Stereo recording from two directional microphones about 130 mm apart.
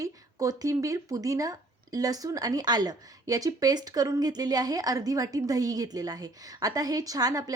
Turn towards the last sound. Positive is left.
turn(degrees=-30)  # may be behind; listen again after turning